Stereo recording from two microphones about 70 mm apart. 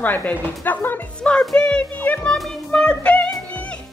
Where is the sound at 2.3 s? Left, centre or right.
Centre.